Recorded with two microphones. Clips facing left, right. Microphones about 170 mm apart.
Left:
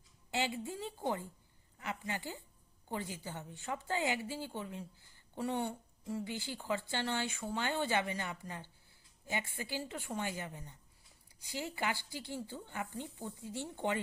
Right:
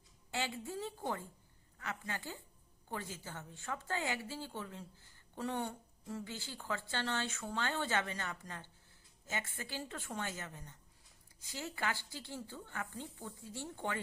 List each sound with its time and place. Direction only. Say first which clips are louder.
0.3 s speech: left 3 dB; 15° left (ahead or behind)